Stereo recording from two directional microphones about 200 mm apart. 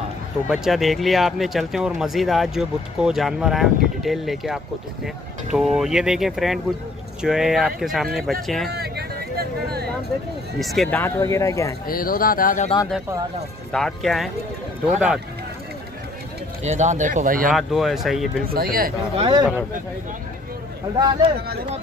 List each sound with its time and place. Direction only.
0.5 s speech: centre (ahead or behind)
8.7 s hubbub: 50° right (ahead or behind)
10.6 s speech: centre (ahead or behind)
11.0 s speech: 10° left (ahead or behind)
11.9 s speech: 45° left (ahead or behind)
13.7 s speech: 5° left (ahead or behind)
16.6 s speech: 35° right (ahead or behind)
17.5 s speech: centre (ahead or behind)
18.5 s speech: 50° right (ahead or behind)
19.1 s speech: 25° right (ahead or behind)
20.9 s speech: 20° right (ahead or behind)